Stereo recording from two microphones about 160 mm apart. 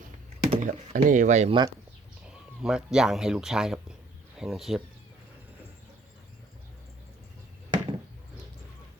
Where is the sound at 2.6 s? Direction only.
5° right (ahead or behind).